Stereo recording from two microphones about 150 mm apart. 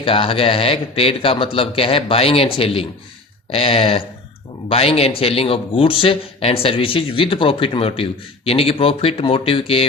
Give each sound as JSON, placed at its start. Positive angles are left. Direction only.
{"t": 0.0, "sound": "a man's voice", "side_deg": 35}